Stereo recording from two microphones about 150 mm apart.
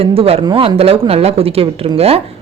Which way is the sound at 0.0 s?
40° right (ahead or behind).